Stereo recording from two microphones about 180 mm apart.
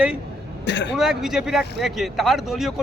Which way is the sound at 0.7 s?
75° left (ahead or behind).